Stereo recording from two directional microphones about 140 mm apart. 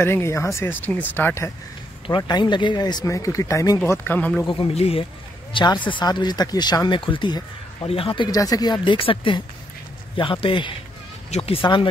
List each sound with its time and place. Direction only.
0.0 s speech: 20° left (ahead or behind)
2.0 s speech: 35° left (ahead or behind); by 4.5 s 10° left (ahead or behind)
4.5 s speech: 40° left (ahead or behind)
11.2 s speech: 50° left (ahead or behind)